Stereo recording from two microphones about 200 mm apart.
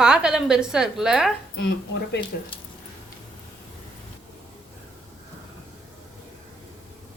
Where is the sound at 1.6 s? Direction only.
60° left (ahead or behind).